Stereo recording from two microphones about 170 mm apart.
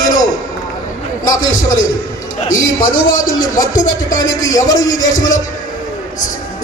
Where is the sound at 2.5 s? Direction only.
20° left (ahead or behind).